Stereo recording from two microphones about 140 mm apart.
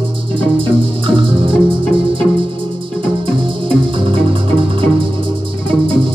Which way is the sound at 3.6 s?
40° right (ahead or behind).